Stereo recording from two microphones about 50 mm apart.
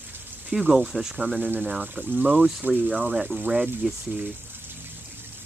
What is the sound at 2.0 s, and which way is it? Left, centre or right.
Speech, right.